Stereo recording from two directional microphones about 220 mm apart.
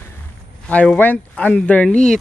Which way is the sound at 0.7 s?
5° left (ahead or behind).